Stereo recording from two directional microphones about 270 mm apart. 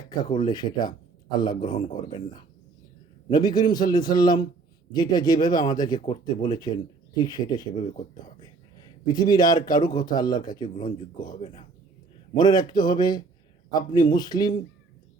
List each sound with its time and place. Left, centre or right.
0.1 s speech: centre
9.1 s speech: centre